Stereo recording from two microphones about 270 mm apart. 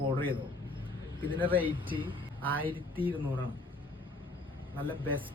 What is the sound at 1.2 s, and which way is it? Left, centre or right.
Speech, centre.